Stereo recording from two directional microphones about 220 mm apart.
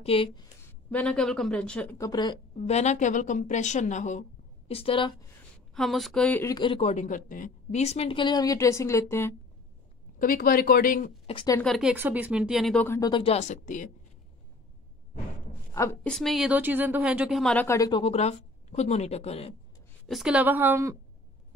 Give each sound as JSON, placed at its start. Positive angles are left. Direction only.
{"t": 0.0, "sound": "speech", "side_deg": 25}
{"t": 0.8, "sound": "speech", "side_deg": 5}
{"t": 2.5, "sound": "a woman's voice", "side_deg": 30}
{"t": 5.8, "sound": "a woman's voice", "side_deg": 0}
{"t": 10.1, "sound": "a woman's voice", "side_deg": 40}
{"t": 11.2, "sound": "speech", "side_deg": 20}
{"t": 11.6, "sound": "speech", "side_deg": 0}
{"t": 15.7, "sound": "a woman's voice", "side_deg": 10}
{"t": 20.1, "sound": "speech", "side_deg": 0}